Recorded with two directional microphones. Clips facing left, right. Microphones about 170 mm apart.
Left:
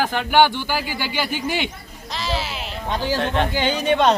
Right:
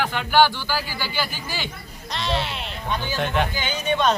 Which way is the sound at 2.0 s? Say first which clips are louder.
Even; centre (ahead or behind).